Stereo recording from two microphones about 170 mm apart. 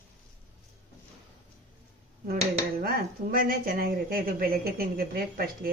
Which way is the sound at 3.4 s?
60° right (ahead or behind).